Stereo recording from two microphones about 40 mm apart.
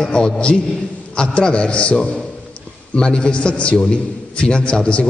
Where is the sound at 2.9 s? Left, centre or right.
Left.